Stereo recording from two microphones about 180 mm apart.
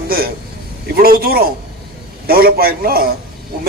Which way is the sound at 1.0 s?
55° right (ahead or behind).